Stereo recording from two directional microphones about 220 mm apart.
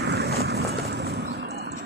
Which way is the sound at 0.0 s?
45° right (ahead or behind).